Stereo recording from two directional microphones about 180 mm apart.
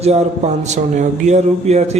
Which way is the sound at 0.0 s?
35° right (ahead or behind).